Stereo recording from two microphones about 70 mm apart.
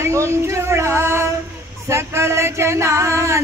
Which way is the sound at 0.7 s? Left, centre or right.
Right.